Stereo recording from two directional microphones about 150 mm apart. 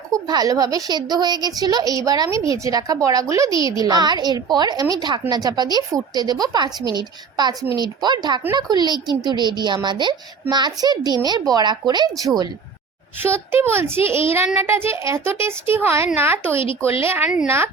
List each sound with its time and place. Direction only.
0.1 s a woman's voice: 25° right (ahead or behind)
13.5 s a child's voice: 15° right (ahead or behind)
17.2 s a woman's voice: 5° right (ahead or behind)